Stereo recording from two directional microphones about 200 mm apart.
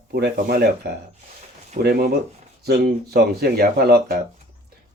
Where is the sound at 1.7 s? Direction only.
50° right (ahead or behind).